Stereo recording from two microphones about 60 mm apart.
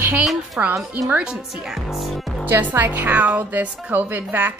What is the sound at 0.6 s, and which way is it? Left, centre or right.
Speech, right.